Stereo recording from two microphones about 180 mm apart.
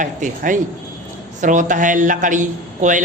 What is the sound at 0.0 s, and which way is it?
A man's voice, 45° right (ahead or behind).